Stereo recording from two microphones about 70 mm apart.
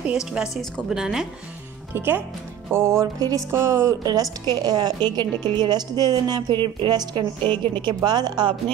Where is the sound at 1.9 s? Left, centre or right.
Right.